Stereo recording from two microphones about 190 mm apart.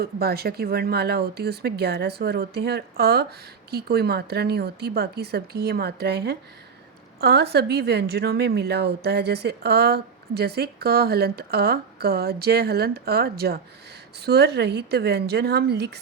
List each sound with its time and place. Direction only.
0.0 s a woman's voice: 55° right (ahead or behind)